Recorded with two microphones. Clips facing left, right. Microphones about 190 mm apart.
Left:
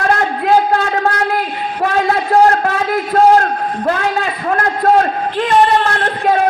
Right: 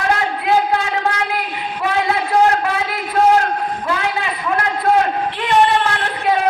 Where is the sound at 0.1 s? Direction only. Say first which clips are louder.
Left 3 dB; 50° left (ahead or behind).